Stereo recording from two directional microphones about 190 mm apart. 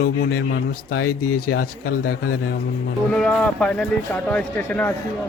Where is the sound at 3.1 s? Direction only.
5° left (ahead or behind).